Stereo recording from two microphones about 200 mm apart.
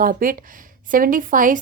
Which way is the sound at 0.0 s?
45° right (ahead or behind).